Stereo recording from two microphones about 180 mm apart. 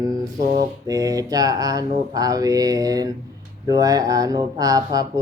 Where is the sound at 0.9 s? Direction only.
20° right (ahead or behind).